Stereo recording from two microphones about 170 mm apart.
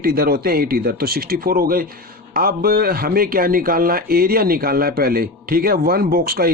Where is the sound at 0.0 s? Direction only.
60° right (ahead or behind).